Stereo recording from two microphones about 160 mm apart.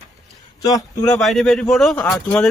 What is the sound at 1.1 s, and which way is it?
Speech, centre (ahead or behind).